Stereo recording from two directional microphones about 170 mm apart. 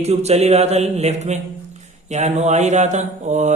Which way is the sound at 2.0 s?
40° right (ahead or behind).